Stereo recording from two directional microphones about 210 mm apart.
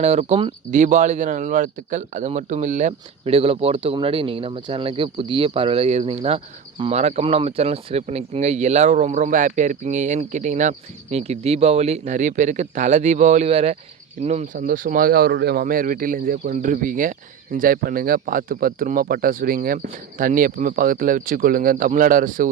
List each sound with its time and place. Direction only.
0.0 s speech: 30° right (ahead or behind)